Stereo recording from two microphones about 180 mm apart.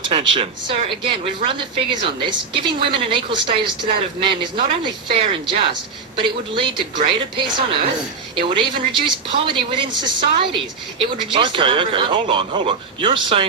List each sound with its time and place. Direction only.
0.0 s speech: 30° right (ahead or behind)